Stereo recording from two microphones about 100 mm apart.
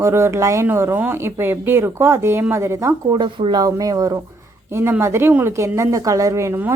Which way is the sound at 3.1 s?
50° right (ahead or behind).